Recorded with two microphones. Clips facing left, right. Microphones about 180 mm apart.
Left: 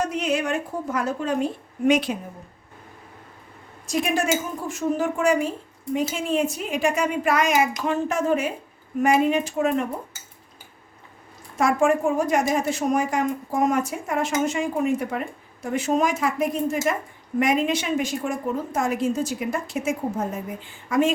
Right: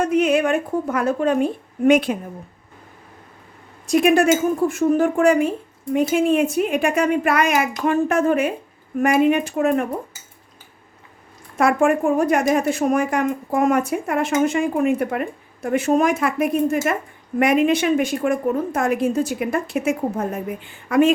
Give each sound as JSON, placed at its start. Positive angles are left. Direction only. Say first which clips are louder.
{"t": 0.0, "sound": "speech", "louder": "right 7 dB", "side_deg": -60}
{"t": 3.8, "sound": "speech", "louder": "right 8 dB", "side_deg": -60}
{"t": 11.5, "sound": "speech", "louder": "right 3 dB", "side_deg": -60}